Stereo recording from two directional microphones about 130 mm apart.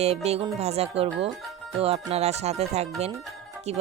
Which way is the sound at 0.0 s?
55° right (ahead or behind).